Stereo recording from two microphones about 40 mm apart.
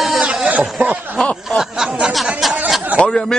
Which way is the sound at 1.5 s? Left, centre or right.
Centre.